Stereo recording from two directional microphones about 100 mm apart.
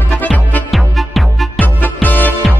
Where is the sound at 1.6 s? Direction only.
15° left (ahead or behind).